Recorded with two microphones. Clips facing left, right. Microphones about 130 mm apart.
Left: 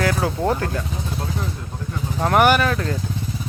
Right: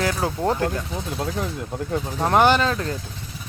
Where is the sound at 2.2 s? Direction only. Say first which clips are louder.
Left 1 dB; 20° right (ahead or behind).